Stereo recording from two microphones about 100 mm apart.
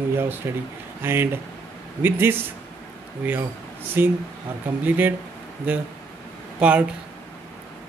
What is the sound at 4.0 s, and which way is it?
Speech, 20° right (ahead or behind).